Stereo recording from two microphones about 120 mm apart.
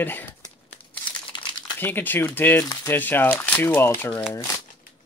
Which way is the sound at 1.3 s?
40° left (ahead or behind).